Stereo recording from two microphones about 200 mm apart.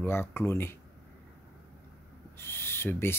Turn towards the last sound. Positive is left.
turn(degrees=10)  # may be behind; listen again after turning